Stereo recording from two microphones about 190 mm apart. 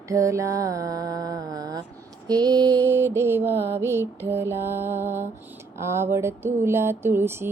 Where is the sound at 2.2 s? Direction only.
20° right (ahead or behind).